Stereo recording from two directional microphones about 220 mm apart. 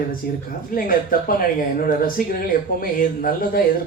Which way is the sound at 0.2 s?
40° left (ahead or behind).